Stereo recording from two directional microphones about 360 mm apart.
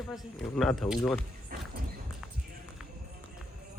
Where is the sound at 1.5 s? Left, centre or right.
Right.